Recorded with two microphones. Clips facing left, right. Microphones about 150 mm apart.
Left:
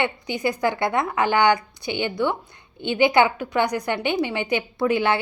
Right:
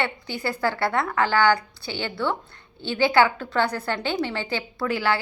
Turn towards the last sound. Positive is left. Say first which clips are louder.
# left 4 dB
turn(degrees=20)  # may be behind; listen again after turning